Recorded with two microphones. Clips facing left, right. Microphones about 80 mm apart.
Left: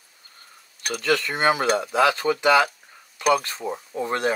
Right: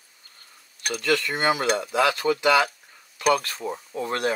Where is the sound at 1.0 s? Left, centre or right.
Left.